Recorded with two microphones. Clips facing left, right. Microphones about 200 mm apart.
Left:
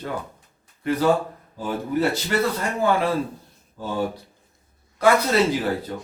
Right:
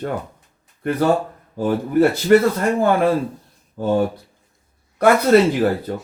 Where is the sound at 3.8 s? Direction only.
60° right (ahead or behind).